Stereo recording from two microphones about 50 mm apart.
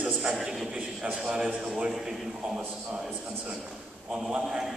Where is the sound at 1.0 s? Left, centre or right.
Right.